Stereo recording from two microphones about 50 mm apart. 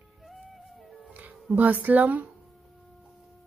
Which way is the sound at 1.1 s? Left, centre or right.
Right.